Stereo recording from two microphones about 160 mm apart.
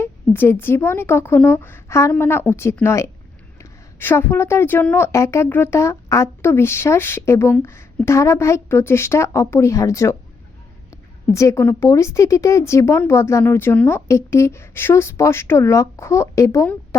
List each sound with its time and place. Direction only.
0.0 s a woman's voice: 15° left (ahead or behind)